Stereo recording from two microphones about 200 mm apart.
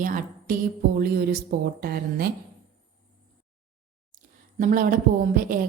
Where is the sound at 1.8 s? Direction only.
50° right (ahead or behind).